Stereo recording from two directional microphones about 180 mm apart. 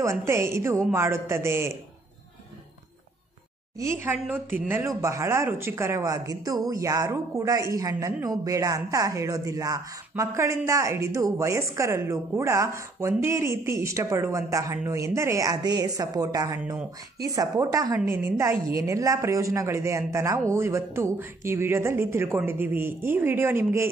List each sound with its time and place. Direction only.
0.0 s speech: 15° right (ahead or behind)
3.7 s speech: 15° right (ahead or behind)